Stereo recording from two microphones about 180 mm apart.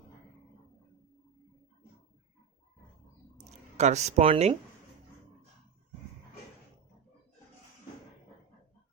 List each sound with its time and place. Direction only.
3.3 s speech: 40° right (ahead or behind)